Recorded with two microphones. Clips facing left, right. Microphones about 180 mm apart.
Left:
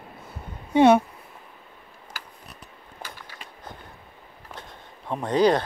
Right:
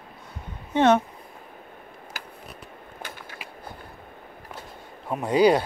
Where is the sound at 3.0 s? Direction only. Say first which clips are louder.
Right 1 dB; 50° right (ahead or behind).